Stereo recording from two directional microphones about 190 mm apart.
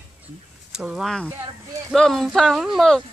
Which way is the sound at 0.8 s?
Centre (ahead or behind).